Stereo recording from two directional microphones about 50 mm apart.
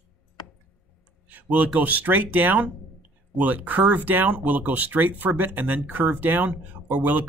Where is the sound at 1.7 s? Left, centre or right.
Right.